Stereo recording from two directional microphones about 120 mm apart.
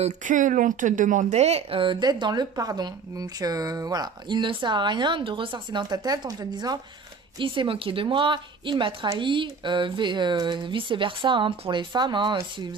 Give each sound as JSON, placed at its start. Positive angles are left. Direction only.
{"t": 0.0, "sound": "speech", "side_deg": -90}
{"t": 7.3, "sound": "a woman's voice", "side_deg": -45}